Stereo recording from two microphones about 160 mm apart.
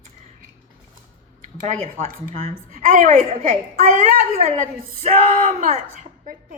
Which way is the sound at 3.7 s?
55° right (ahead or behind).